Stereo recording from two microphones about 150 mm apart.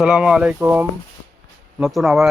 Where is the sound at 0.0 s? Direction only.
5° right (ahead or behind).